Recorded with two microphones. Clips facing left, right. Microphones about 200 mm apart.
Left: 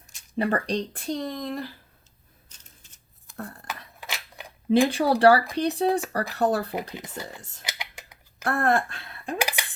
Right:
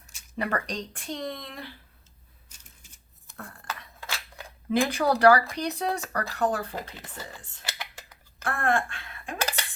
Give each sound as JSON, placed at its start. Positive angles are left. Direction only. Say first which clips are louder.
{"t": 0.3, "sound": "speech", "louder": "left 5 dB", "side_deg": 30}
{"t": 3.3, "sound": "cutlery", "louder": "left 6 dB", "side_deg": 40}
{"t": 4.0, "sound": "a sound", "louder": "even", "side_deg": 15}
{"t": 4.9, "sound": "speech", "louder": "right 2 dB", "side_deg": 30}
{"t": 6.9, "sound": "speech", "louder": "left 6 dB", "side_deg": 15}
{"t": 7.6, "sound": "a sound", "louder": "right 1 dB", "side_deg": 15}
{"t": 8.4, "sound": "a woman's voice", "louder": "left 3 dB", "side_deg": 40}
{"t": 9.4, "sound": "dishes", "louder": "left 1 dB", "side_deg": 10}